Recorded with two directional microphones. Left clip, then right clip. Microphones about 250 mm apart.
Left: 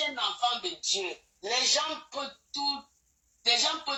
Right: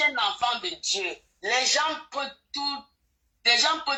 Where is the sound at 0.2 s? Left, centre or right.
Right.